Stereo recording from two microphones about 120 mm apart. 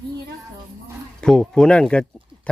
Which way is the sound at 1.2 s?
5° left (ahead or behind).